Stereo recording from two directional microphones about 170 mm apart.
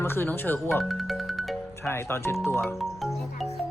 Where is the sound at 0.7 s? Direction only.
Centre (ahead or behind).